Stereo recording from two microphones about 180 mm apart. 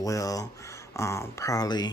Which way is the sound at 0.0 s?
20° left (ahead or behind).